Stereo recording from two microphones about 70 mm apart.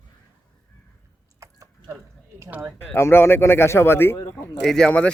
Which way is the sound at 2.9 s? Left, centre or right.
Left.